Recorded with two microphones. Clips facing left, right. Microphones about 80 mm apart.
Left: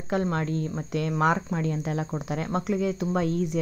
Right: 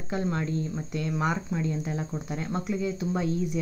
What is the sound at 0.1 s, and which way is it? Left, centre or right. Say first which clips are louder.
Speech: left 3 dB; left.